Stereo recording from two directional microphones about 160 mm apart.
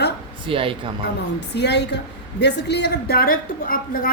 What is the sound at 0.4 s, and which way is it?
Speech, 35° right (ahead or behind).